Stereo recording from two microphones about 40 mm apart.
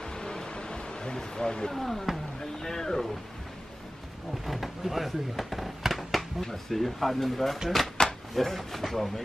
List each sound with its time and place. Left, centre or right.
0.1 s a sound: centre
2.6 s speech: centre
4.5 s speech: centre